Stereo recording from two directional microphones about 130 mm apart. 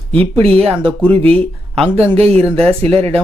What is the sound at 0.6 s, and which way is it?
Speech, 50° right (ahead or behind).